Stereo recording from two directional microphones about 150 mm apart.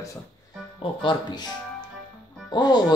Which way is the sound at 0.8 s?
35° left (ahead or behind).